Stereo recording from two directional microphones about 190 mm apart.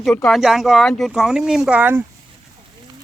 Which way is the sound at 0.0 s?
Centre (ahead or behind).